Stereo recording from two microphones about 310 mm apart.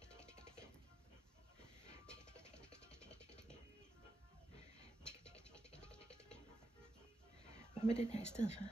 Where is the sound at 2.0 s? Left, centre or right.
Centre.